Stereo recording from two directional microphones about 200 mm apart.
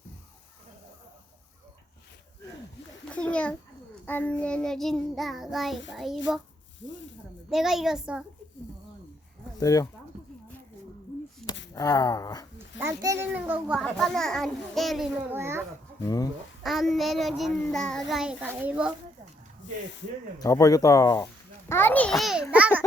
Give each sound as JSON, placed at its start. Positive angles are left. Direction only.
{"t": 3.1, "sound": "a sound", "side_deg": 5}
{"t": 4.0, "sound": "a child's voice", "side_deg": 10}
{"t": 7.5, "sound": "a child's voice", "side_deg": 0}
{"t": 9.6, "sound": "speech", "side_deg": 15}
{"t": 11.7, "sound": "speech", "side_deg": 20}
{"t": 12.8, "sound": "a child's voice", "side_deg": -15}
{"t": 16.0, "sound": "speech", "side_deg": 15}
{"t": 16.6, "sound": "a child's voice", "side_deg": 0}
{"t": 20.4, "sound": "a child's voice", "side_deg": 15}
{"t": 22.5, "sound": "babbling", "side_deg": -5}